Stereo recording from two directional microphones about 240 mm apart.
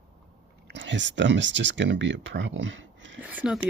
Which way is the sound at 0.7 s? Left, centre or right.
Right.